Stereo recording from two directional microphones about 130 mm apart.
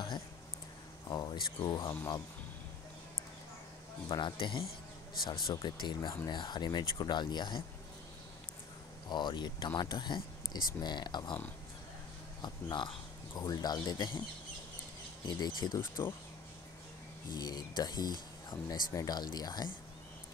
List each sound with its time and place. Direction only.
1.0 s speech: 35° left (ahead or behind)
4.1 s speech: 40° left (ahead or behind)
9.1 s speech: 35° left (ahead or behind)
12.4 s speech: 35° left (ahead or behind)
15.2 s speech: 30° left (ahead or behind)
17.3 s speech: 30° left (ahead or behind)